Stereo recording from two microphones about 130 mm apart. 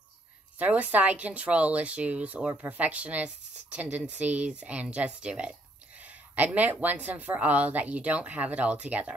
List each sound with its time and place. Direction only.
0.6 s speech: 10° right (ahead or behind)